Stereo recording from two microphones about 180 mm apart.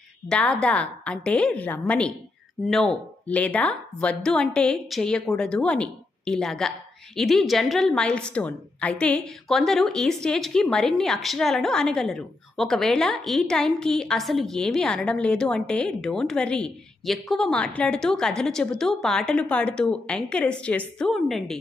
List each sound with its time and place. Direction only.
0.3 s a woman's voice: 5° left (ahead or behind)